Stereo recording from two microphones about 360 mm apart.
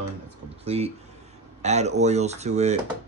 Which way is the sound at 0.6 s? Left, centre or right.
Centre.